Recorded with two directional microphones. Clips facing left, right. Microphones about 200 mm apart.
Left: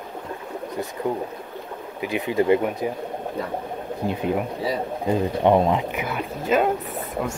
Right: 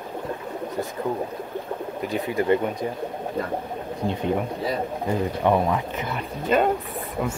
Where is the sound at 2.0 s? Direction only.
15° left (ahead or behind).